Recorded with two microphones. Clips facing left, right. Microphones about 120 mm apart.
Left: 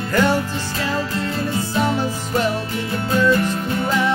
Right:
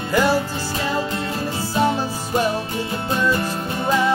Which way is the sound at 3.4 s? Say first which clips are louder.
Left 3 dB; 30° right (ahead or behind).